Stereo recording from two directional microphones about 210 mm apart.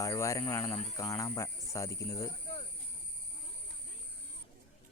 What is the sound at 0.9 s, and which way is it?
Speech, 15° left (ahead or behind).